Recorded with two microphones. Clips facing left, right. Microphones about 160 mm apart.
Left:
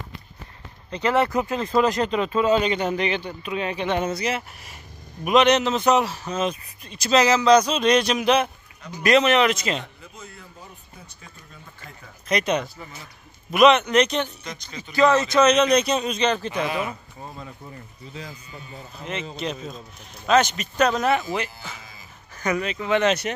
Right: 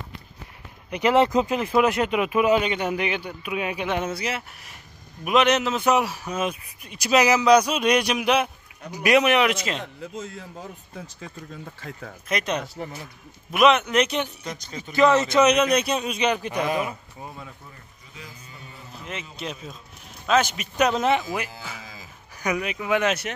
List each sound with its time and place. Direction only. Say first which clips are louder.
0.8 s speech: right 2 dB; 15° right (ahead or behind)
10.1 s speech: right 8 dB; 90° right
12.3 s a man's voice: left 4 dB; centre (ahead or behind)
14.8 s speech: even; 20° right (ahead or behind)
19.3 s a man's voice: left 4 dB; 5° right (ahead or behind)